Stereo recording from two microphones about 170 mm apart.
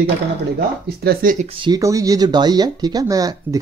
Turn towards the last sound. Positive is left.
turn(degrees=-20)  # may be behind; listen again after turning